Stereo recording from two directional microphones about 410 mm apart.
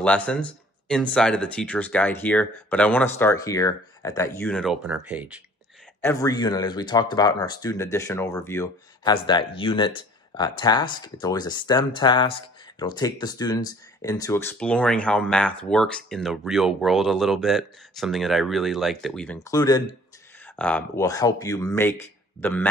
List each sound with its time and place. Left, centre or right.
0.0 s speech: centre
5.9 s speech: centre